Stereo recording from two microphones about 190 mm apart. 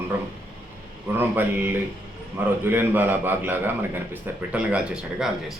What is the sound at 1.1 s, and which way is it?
Speech, 10° right (ahead or behind).